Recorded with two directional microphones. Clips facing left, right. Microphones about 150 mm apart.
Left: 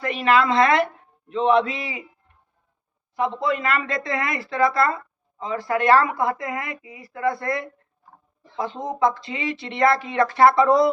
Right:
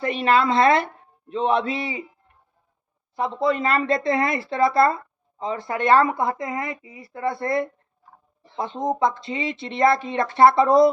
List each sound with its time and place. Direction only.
0.0 s a woman's voice: 30° right (ahead or behind)
3.2 s a woman's voice: 30° right (ahead or behind)
9.0 s a woman's voice: 25° right (ahead or behind)